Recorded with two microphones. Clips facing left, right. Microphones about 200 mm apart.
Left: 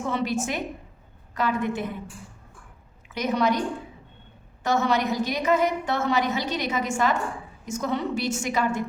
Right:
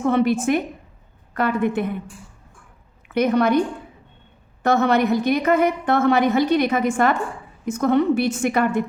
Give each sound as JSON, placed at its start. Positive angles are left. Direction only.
{"t": 0.0, "sound": "a woman's voice", "side_deg": -55}
{"t": 3.1, "sound": "a woman's voice", "side_deg": -60}
{"t": 4.6, "sound": "a woman's voice", "side_deg": -55}